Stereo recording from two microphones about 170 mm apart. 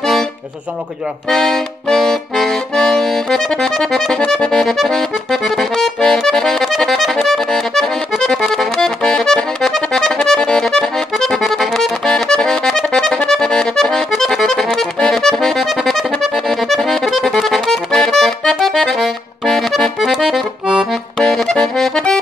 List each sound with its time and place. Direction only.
1.3 s accordion: centre (ahead or behind)